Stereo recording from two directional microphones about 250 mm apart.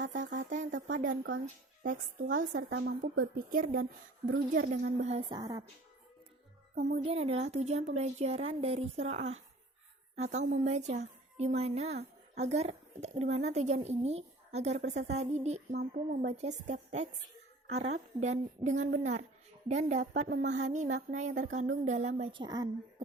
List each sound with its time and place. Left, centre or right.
0.2 s speech: right
0.7 s a woman's voice: right
0.9 s a woman's voice: right
2.6 s a woman's voice: right
5.3 s speech: centre
6.7 s a woman's voice: right